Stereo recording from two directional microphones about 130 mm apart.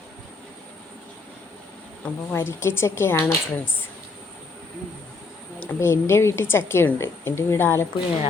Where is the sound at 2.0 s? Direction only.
20° left (ahead or behind).